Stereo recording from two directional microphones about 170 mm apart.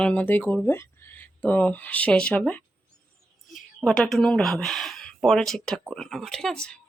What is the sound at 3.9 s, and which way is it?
Speech, centre (ahead or behind).